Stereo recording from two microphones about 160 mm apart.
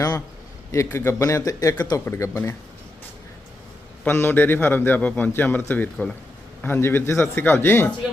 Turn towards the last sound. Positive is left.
turn(degrees=15)  # may be behind; listen again after turning